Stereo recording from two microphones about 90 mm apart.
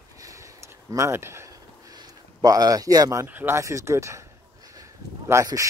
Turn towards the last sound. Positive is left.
turn(degrees=-40)  # may be behind; listen again after turning